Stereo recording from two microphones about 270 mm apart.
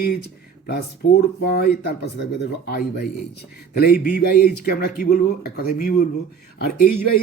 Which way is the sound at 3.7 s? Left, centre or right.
Left.